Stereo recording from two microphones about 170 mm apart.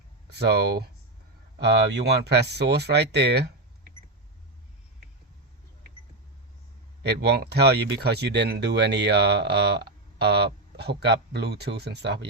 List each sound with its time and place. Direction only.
0.3 s speech: 75° right (ahead or behind)
1.6 s speech: 85° right
7.0 s speech: 80° right